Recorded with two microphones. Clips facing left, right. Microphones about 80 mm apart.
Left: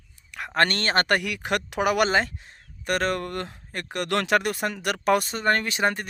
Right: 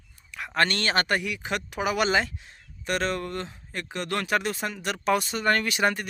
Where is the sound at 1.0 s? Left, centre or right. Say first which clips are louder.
Left 3 dB; left.